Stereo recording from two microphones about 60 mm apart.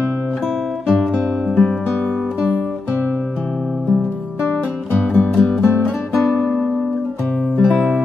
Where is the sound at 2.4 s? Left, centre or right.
Left.